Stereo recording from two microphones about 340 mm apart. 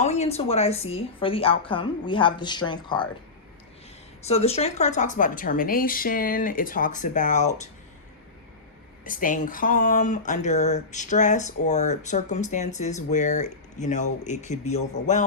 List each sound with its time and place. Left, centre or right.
0.0 s a woman's voice: centre
4.2 s speech: centre
9.0 s speech: left